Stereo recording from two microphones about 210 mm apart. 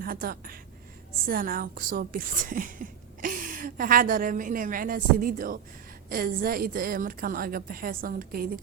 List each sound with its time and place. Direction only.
0.0 s a woman's voice: 45° right (ahead or behind)